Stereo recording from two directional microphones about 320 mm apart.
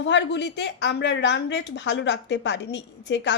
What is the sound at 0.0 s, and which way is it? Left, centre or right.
A woman's voice, left.